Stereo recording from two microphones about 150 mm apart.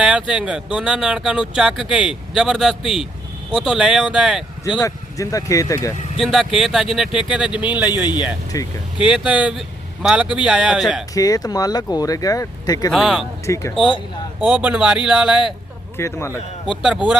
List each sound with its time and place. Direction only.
0.0 s speech: 5° right (ahead or behind)
4.8 s speech: 20° left (ahead or behind)
6.1 s speech: centre (ahead or behind)
8.5 s speech: 25° left (ahead or behind)
9.0 s speech: 5° right (ahead or behind)
11.1 s speech: 25° left (ahead or behind)
12.9 s speech: centre (ahead or behind)
13.4 s speech: 20° left (ahead or behind)
14.5 s speech: 10° right (ahead or behind)
16.0 s speech: 20° left (ahead or behind)
16.6 s speech: 5° right (ahead or behind)